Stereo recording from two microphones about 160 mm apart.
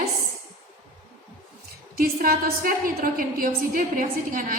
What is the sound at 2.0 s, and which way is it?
A woman's voice, 65° right (ahead or behind).